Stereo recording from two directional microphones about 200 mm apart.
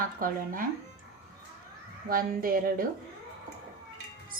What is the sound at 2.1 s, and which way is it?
Speech, 45° right (ahead or behind).